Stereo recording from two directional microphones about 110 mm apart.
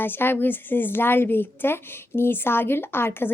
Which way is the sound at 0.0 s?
20° left (ahead or behind).